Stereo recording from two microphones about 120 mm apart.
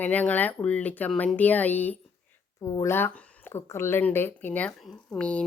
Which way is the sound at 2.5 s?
30° left (ahead or behind).